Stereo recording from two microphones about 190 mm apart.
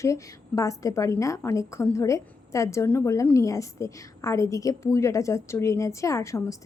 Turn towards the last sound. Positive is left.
turn(degrees=15)  # may be behind; listen again after turning